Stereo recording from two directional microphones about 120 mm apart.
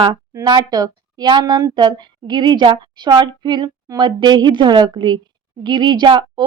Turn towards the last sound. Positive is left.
turn(degrees=-40)  # may be behind; listen again after turning